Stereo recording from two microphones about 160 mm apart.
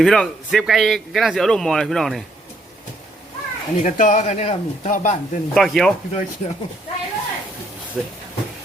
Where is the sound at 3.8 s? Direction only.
50° left (ahead or behind).